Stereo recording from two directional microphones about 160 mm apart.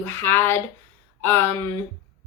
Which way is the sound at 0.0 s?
15° left (ahead or behind).